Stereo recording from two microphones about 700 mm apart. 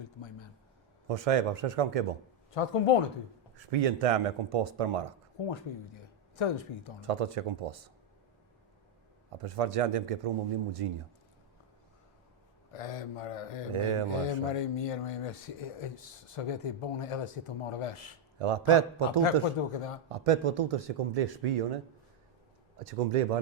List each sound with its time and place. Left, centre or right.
0.2 s a sound: left
1.0 s speech: right
2.6 s speech: left
3.5 s speech: right
5.5 s speech: left
7.1 s speech: right
9.4 s speech: right
12.7 s speech: left
13.7 s speech: right
14.5 s speech: left
18.3 s speech: right
19.2 s speech: left
20.1 s speech: right
22.8 s speech: right